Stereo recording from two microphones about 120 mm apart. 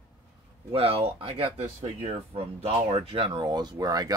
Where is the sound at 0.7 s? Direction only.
50° right (ahead or behind).